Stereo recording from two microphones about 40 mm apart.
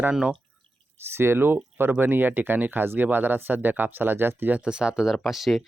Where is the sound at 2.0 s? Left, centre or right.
Right.